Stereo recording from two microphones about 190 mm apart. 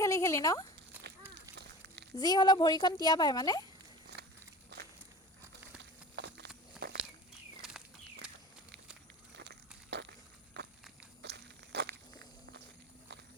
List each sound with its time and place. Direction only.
0.0 s speech: 15° left (ahead or behind)
0.9 s run: 10° right (ahead or behind)
2.1 s speech: 20° left (ahead or behind)
4.7 s walk: 60° right (ahead or behind)
6.1 s a sound: 60° right (ahead or behind)
6.8 s walk: 60° right (ahead or behind)
7.6 s a sound: centre (ahead or behind)
9.4 s a sound: 65° right (ahead or behind)
11.2 s walk: 60° right (ahead or behind)